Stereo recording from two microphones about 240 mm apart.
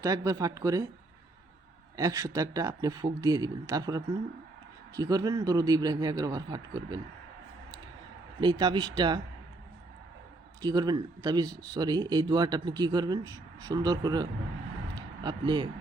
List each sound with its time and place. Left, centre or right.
0.0 s speech: centre
2.0 s speech: centre
8.4 s speech: centre
10.6 s speech: centre
14.9 s a sound: centre